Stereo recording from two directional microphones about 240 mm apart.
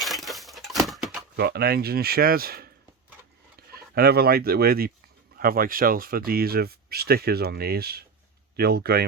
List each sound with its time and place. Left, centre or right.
0.0 s a sound: centre
1.4 s speech: right
3.8 s speech: right